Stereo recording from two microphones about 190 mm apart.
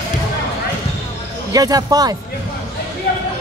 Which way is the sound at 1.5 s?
20° right (ahead or behind).